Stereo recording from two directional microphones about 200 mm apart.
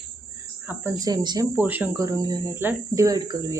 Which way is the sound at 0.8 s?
20° right (ahead or behind).